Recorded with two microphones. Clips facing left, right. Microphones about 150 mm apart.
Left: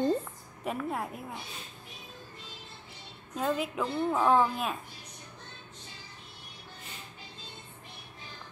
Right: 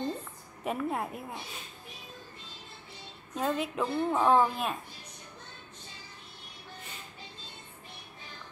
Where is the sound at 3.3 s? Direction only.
Centre (ahead or behind).